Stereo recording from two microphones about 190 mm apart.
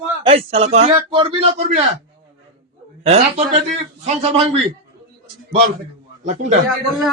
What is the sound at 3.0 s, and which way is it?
A man's voice, 35° right (ahead or behind).